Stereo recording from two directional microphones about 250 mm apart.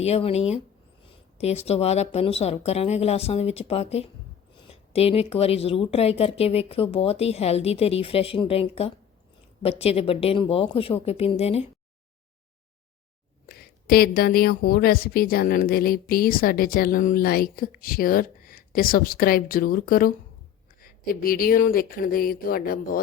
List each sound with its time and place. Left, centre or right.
0.0 s speech: left
13.5 s a woman's voice: left